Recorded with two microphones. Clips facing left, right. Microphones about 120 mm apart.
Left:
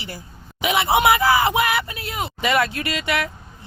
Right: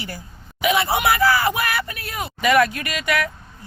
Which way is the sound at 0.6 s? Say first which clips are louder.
Left 1 dB; 25° left (ahead or behind).